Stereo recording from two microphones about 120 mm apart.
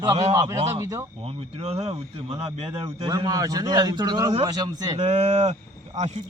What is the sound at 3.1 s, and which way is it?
A man's voice, 30° right (ahead or behind).